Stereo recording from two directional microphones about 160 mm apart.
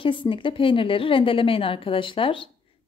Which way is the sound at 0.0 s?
30° left (ahead or behind).